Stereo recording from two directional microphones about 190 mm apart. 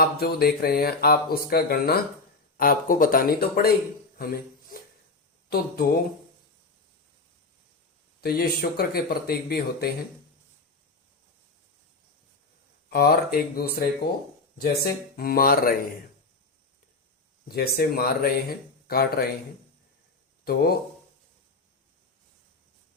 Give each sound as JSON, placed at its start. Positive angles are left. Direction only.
{"t": 0.0, "sound": "speech", "side_deg": 55}
{"t": 4.2, "sound": "a sound", "side_deg": 50}
{"t": 5.5, "sound": "speech", "side_deg": 55}
{"t": 8.2, "sound": "speech", "side_deg": 55}
{"t": 12.9, "sound": "speech", "side_deg": 55}
{"t": 17.5, "sound": "speech", "side_deg": 55}
{"t": 20.4, "sound": "speech", "side_deg": 55}